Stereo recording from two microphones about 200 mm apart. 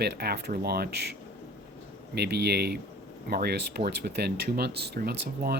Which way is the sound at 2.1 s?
55° right (ahead or behind).